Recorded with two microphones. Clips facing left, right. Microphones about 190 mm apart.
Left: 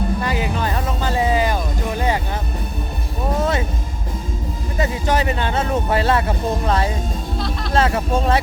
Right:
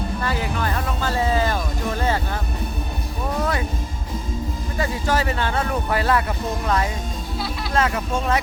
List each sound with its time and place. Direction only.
0.2 s music: 15° left (ahead or behind)
4.8 s a sound: 20° left (ahead or behind)
7.7 s speech: 30° left (ahead or behind)